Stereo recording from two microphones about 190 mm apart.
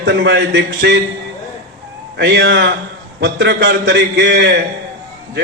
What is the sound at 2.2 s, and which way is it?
A man's voice, 65° right (ahead or behind).